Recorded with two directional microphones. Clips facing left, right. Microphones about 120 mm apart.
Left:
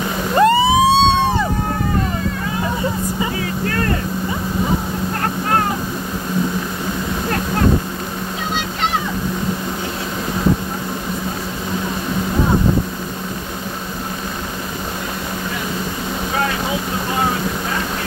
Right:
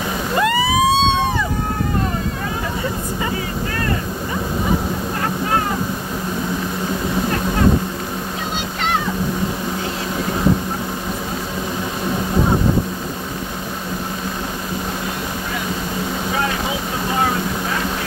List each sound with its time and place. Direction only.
0.4 s fire engine: 30° left (ahead or behind)